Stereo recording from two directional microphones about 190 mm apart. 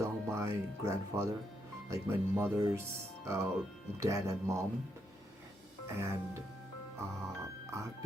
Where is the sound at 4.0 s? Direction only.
15° right (ahead or behind).